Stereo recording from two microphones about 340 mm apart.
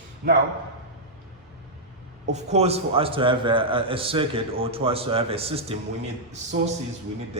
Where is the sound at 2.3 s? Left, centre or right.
Centre.